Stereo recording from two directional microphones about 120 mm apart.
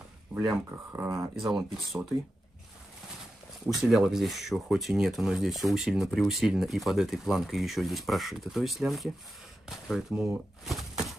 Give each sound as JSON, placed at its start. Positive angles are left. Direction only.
{"t": 0.3, "sound": "speech", "side_deg": -5}
{"t": 0.7, "sound": "speech", "side_deg": -20}
{"t": 1.5, "sound": "speech", "side_deg": -5}
{"t": 3.6, "sound": "speech", "side_deg": -5}
{"t": 10.6, "sound": "a sound", "side_deg": 0}